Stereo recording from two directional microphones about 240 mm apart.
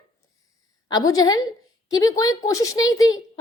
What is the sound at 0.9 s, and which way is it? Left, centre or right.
A woman's voice, centre.